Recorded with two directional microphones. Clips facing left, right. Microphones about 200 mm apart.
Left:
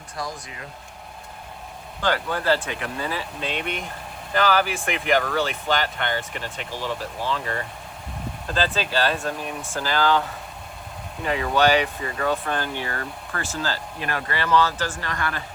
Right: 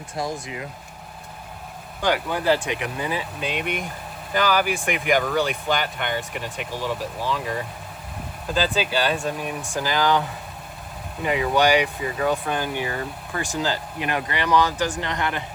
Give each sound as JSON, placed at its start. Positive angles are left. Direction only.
{"t": 0.2, "sound": "speech", "side_deg": -25}
{"t": 2.0, "sound": "speech", "side_deg": -15}